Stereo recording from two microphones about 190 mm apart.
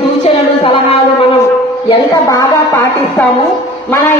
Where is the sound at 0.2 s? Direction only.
30° left (ahead or behind).